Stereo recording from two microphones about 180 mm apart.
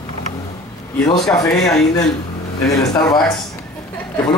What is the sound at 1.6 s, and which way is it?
Speech, centre (ahead or behind).